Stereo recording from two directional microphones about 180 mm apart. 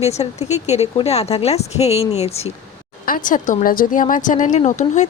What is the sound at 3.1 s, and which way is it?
Speech, 50° left (ahead or behind).